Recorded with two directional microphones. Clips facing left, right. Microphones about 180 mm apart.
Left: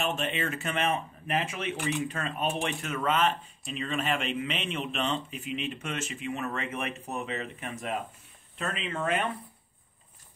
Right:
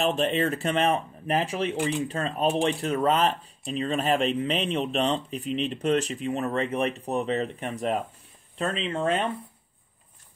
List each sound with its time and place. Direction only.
0.3 s speech: 35° right (ahead or behind)